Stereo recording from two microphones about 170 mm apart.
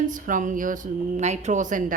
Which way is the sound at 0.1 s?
50° right (ahead or behind).